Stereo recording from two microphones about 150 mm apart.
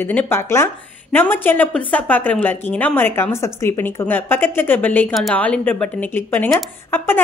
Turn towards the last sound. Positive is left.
turn(degrees=15)  # may be behind; listen again after turning